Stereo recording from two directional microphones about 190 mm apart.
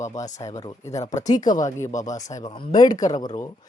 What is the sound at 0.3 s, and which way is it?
Speech, 20° left (ahead or behind).